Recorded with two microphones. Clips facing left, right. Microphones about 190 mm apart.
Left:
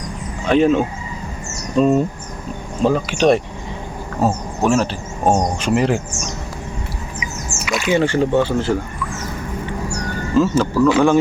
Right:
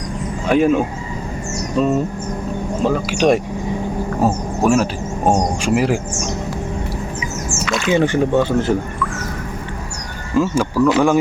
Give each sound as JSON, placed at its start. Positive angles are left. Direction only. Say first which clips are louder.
{"t": 0.4, "sound": "speech", "louder": "even", "side_deg": -10}
{"t": 7.9, "sound": "speech", "louder": "even", "side_deg": -15}
{"t": 10.3, "sound": "speech", "louder": "left 1 dB", "side_deg": -10}